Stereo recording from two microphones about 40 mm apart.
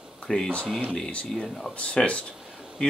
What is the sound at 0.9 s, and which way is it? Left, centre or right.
Speech, left.